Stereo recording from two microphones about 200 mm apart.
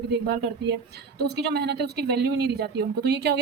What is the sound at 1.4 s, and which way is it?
Speech, 55° right (ahead or behind).